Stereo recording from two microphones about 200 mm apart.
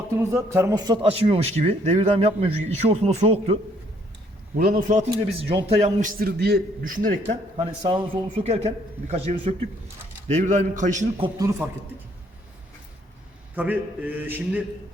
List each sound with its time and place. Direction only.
0.2 s a man's voice: 15° right (ahead or behind); by 3.6 s 30° right (ahead or behind)
4.5 s a man's voice: 45° right (ahead or behind)
5.1 s a man's voice: 25° right (ahead or behind); by 7.2 s 45° right (ahead or behind)
7.5 s a man's voice: 25° right (ahead or behind)
11.2 s mantra: 15° right (ahead or behind)
13.6 s mantra: 10° right (ahead or behind)